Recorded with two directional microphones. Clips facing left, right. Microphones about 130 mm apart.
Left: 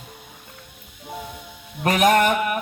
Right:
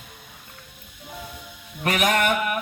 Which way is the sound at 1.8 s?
35° left (ahead or behind).